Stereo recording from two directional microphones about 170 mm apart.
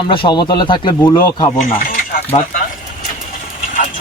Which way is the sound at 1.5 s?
50° left (ahead or behind).